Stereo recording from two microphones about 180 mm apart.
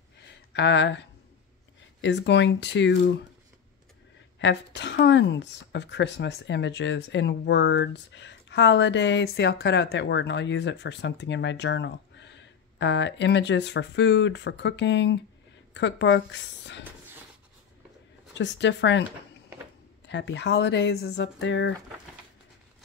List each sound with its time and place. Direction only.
0.2 s a sound: 80° left
2.0 s speech: 75° left (ahead or behind)
4.4 s speech: 75° left (ahead or behind)
18.4 s speech: 80° left
20.1 s speech: 85° left